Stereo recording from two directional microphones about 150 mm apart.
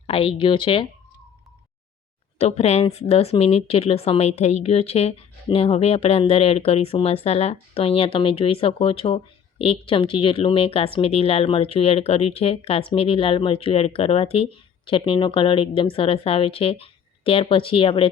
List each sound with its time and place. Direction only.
0.1 s speech: 35° left (ahead or behind)
2.4 s a woman's voice: 45° left (ahead or behind)